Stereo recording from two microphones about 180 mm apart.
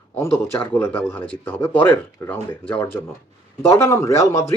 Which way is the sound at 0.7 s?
10° left (ahead or behind).